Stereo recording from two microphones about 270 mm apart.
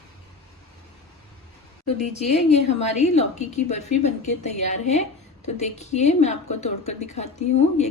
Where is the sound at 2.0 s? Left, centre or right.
Left.